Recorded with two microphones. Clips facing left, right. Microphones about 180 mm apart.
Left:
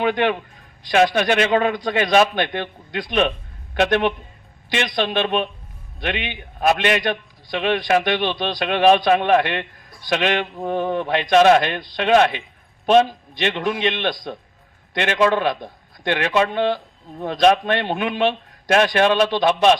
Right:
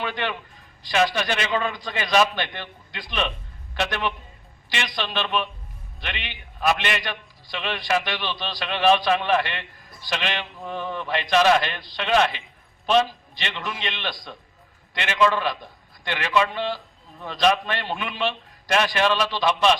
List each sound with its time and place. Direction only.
0.0 s a man's voice: 55° left (ahead or behind)